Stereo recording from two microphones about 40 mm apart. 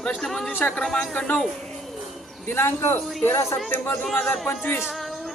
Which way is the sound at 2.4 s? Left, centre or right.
Left.